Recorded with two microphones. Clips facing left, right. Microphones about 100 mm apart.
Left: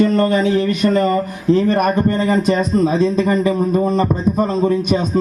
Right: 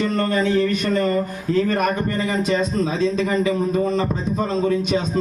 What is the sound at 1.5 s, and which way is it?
Speech, 45° left (ahead or behind).